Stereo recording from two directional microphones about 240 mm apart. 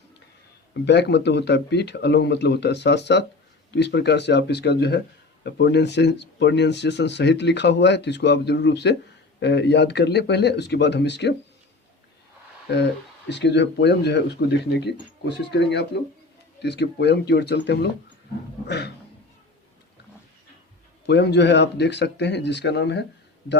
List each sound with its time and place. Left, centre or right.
0.9 s speech: left
12.7 s speech: left
21.1 s speech: left